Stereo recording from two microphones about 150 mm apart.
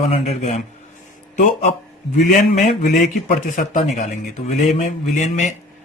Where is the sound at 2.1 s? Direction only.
60° left (ahead or behind).